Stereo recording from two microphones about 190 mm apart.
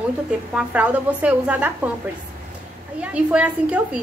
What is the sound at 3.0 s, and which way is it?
Speech, 5° right (ahead or behind).